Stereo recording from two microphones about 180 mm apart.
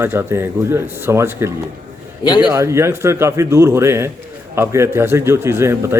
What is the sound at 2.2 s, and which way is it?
Speech, 25° left (ahead or behind).